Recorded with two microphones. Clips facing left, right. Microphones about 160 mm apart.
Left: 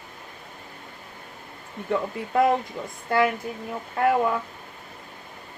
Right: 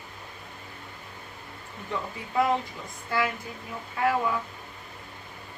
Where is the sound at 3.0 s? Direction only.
55° left (ahead or behind).